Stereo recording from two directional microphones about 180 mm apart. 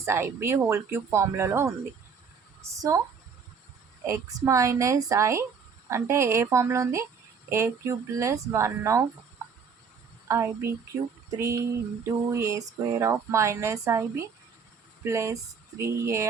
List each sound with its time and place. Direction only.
0.0 s a woman's voice: 15° right (ahead or behind)
4.0 s speech: 15° right (ahead or behind)
10.2 s speech: 15° right (ahead or behind)